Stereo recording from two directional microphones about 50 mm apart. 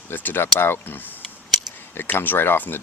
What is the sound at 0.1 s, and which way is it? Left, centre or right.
Speech, left.